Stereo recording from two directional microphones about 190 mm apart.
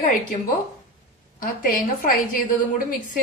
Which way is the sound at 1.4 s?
45° left (ahead or behind).